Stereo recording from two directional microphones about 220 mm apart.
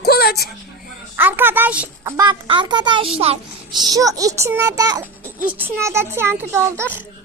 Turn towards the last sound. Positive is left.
turn(degrees=-10)  # may be behind; listen again after turning